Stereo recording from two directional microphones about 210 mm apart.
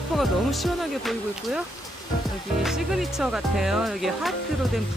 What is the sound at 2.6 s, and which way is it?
Speech, centre (ahead or behind).